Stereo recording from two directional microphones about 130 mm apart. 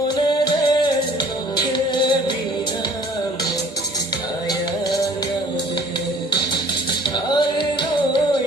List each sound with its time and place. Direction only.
0.3 s music: 30° left (ahead or behind)
7.3 s music: 35° left (ahead or behind)